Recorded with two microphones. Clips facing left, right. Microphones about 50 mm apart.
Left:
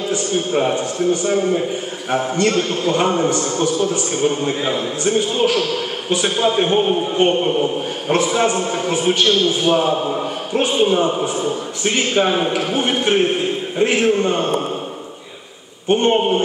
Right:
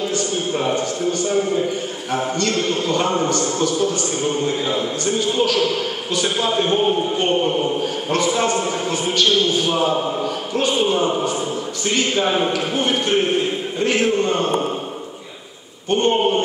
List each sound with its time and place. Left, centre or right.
0.1 s a man's voice: left
15.9 s a man's voice: left